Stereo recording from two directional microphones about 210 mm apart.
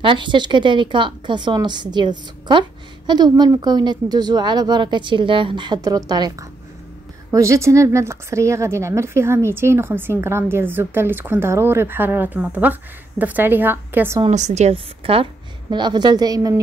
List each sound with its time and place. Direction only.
0.0 s speech: 25° right (ahead or behind)
14.2 s speech: 35° right (ahead or behind); by 16.5 s 20° right (ahead or behind)